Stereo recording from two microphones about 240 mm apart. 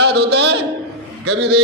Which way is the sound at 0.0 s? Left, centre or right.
Right.